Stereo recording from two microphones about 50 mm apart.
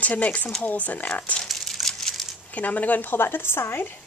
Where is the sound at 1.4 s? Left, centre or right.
Centre.